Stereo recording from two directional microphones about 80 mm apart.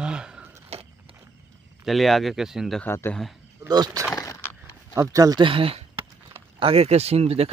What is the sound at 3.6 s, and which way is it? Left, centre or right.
Speech, right.